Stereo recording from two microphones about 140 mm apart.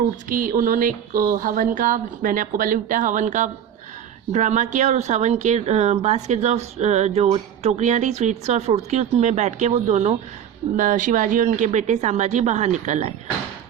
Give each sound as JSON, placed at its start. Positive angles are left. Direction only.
{"t": 0.3, "sound": "speech", "side_deg": -85}
{"t": 10.8, "sound": "a woman's voice", "side_deg": -65}